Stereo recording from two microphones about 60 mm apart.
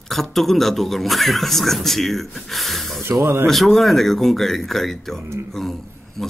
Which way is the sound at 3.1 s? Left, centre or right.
Right.